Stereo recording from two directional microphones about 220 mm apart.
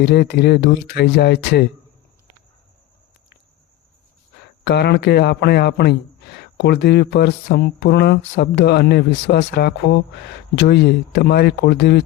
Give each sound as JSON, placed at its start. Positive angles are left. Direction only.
{"t": 0.0, "sound": "a man's voice", "side_deg": 50}
{"t": 4.6, "sound": "a man's voice", "side_deg": 50}